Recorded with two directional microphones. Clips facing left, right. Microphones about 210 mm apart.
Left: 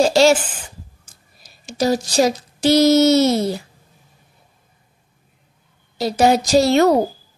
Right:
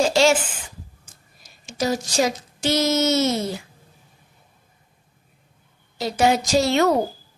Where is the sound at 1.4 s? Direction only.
35° left (ahead or behind).